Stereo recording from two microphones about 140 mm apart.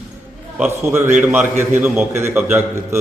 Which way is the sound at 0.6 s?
15° right (ahead or behind).